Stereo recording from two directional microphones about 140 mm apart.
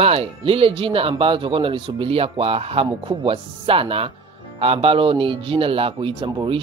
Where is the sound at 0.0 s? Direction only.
45° right (ahead or behind).